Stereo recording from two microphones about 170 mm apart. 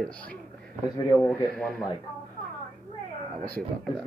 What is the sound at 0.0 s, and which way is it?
Speech, 5° left (ahead or behind).